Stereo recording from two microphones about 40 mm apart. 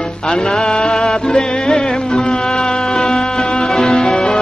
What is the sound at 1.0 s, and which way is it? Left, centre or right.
Music, centre.